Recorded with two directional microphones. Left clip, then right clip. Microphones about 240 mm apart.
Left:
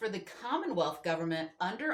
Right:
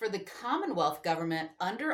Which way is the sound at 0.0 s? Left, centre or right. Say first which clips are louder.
Right 3 dB; right.